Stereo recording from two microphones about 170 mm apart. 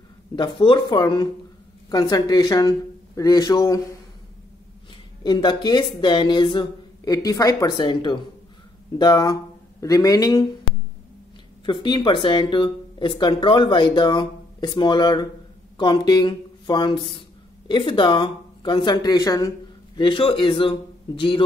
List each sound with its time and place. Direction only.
0.4 s speech: 30° left (ahead or behind)
5.2 s speech: 25° left (ahead or behind)
11.6 s a man's voice: 30° left (ahead or behind)